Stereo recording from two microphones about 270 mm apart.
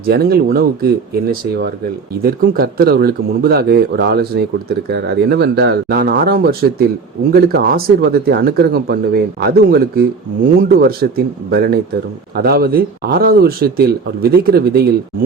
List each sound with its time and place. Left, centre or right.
0.0 s speech: right
2.2 s speech: right